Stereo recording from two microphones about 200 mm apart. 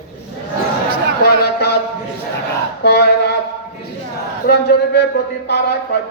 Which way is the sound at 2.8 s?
55° left (ahead or behind).